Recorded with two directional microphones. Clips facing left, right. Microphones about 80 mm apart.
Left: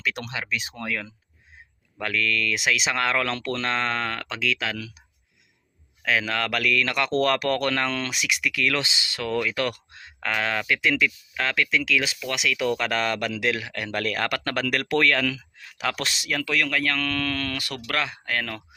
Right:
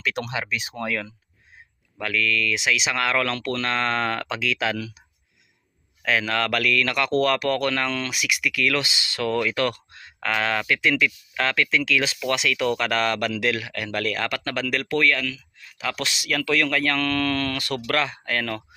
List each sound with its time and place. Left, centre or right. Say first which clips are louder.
0.0 s speech: right 2 dB; centre
0.3 s speech: right 2 dB; centre
2.0 s speech: right 1 dB; left
2.9 s speech: right 1 dB; left
4.0 s speech: right 3 dB; centre
6.1 s speech: right 2 dB; centre
7.2 s speech: right 1 dB; left
14.3 s speech: left 1 dB; left
14.8 s speech: even; left
15.6 s speech: left 1 dB; left
16.0 s speech: right 1 dB; left
16.2 s speech: right 3 dB; left
16.5 s speech: right 3 dB; centre